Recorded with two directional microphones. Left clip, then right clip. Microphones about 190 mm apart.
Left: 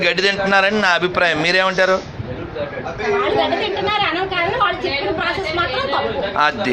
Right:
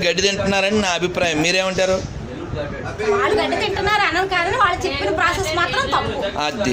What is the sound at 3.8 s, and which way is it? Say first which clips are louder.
Speech: right 2 dB; 20° right (ahead or behind).